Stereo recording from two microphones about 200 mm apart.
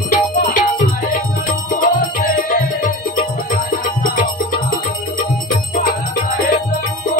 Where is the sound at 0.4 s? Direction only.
40° left (ahead or behind).